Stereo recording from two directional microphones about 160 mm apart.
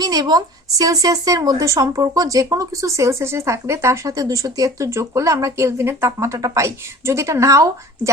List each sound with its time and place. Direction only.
0.0 s speech: 25° right (ahead or behind)